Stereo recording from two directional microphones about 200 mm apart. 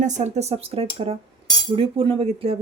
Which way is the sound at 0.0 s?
35° right (ahead or behind).